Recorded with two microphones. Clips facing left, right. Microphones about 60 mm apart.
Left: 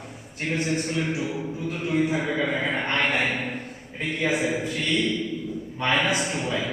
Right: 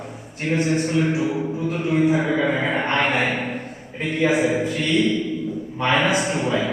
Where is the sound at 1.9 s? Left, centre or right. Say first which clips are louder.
Right 5 dB; centre.